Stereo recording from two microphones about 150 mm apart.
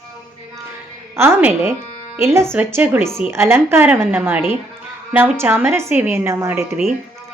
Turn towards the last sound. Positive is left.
turn(degrees=-15)  # may be behind; listen again after turning